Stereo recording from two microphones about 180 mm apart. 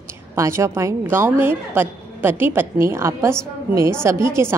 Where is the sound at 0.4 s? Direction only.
15° right (ahead or behind).